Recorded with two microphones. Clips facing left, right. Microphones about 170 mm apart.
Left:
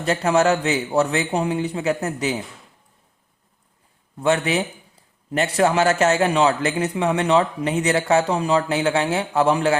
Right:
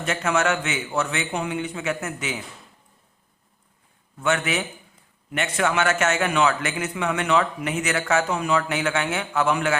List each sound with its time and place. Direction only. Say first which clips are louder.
0.0 s a man's voice: left 5 dB; 35° left (ahead or behind)
4.2 s a man's voice: left 4 dB; 30° left (ahead or behind)